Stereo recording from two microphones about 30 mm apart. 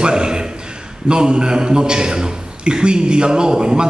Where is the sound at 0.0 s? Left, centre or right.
Right.